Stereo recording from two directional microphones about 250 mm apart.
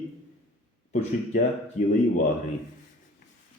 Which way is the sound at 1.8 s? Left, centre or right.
Left.